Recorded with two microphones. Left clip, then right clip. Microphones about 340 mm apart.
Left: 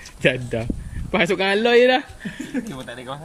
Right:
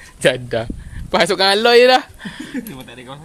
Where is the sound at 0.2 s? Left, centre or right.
Right.